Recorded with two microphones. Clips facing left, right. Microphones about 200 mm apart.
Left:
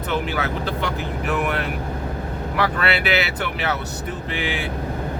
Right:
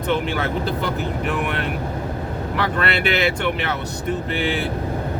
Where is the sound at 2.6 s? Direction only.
5° left (ahead or behind).